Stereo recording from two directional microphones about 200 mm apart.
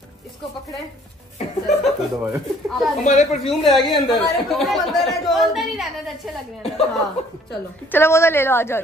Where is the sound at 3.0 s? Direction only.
40° left (ahead or behind).